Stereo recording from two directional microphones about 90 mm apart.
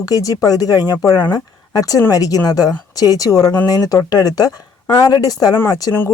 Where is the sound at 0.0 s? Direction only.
45° left (ahead or behind).